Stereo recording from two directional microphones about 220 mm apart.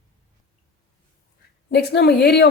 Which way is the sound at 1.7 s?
50° left (ahead or behind).